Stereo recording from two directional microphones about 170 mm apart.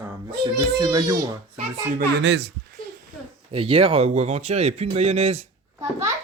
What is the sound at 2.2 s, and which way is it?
Speech, 85° right.